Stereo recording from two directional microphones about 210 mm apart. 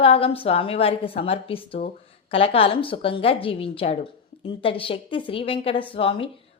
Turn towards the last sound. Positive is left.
turn(degrees=25)  # may be behind; listen again after turning